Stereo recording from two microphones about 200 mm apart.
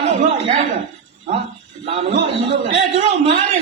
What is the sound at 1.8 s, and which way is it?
A man's voice, 35° right (ahead or behind).